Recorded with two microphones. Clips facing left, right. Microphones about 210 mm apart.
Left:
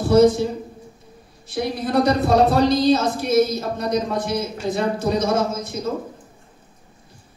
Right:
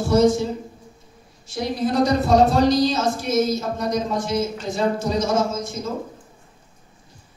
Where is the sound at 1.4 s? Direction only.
55° left (ahead or behind).